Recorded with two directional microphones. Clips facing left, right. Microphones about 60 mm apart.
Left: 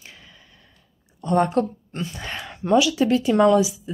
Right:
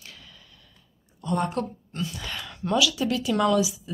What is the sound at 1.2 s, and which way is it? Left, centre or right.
Speech, left.